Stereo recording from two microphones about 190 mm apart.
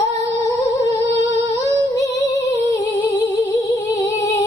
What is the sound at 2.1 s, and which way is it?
Female singing, 65° left (ahead or behind).